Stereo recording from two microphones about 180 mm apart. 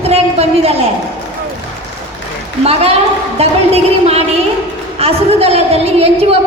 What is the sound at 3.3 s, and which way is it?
A woman's voice, 35° right (ahead or behind).